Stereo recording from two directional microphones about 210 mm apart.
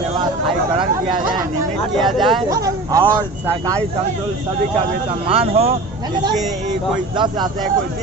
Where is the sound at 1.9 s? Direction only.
Centre (ahead or behind).